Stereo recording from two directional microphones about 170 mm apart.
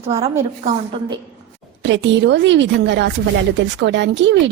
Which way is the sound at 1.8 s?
90° right.